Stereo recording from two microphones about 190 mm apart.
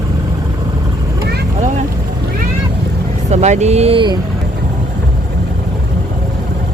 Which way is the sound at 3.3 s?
35° right (ahead or behind).